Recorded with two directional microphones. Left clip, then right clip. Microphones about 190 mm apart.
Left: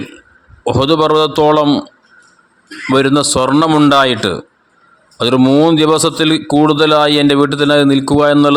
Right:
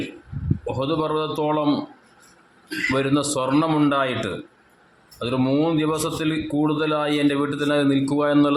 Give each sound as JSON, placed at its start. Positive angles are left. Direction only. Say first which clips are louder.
{"t": 0.6, "sound": "a man's voice", "louder": "left 13 dB", "side_deg": 50}
{"t": 2.9, "sound": "a man's voice", "louder": "left 12 dB", "side_deg": 45}